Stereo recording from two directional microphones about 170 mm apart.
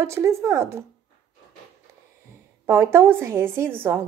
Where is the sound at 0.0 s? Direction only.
15° right (ahead or behind).